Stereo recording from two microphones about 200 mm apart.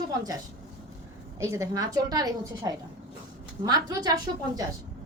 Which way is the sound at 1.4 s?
15° right (ahead or behind).